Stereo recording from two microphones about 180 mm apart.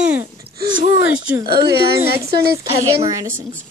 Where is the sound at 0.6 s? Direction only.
45° right (ahead or behind).